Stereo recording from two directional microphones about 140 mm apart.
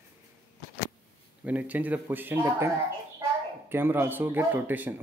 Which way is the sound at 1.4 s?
10° right (ahead or behind).